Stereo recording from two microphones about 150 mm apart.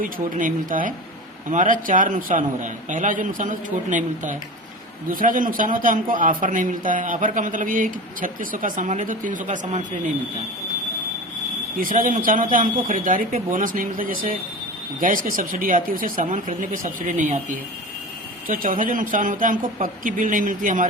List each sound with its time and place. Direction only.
0.0 s a man's voice: 65° right (ahead or behind)
11.8 s a man's voice: 65° right (ahead or behind)
18.4 s a man's voice: 70° right (ahead or behind)